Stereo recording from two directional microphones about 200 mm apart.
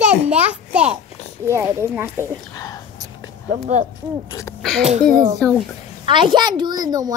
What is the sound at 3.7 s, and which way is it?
Speech, 35° right (ahead or behind).